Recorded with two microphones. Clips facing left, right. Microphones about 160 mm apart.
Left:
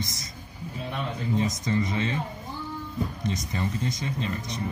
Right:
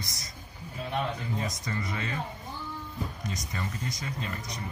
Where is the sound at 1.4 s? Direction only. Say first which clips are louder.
Left 8 dB; 20° left (ahead or behind).